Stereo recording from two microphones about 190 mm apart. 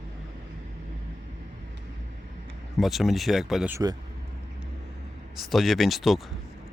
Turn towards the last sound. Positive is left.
turn(degrees=0)  # may be behind; listen again after turning